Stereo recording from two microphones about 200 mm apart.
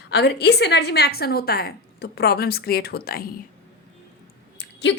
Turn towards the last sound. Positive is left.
turn(degrees=60)  # may be behind; listen again after turning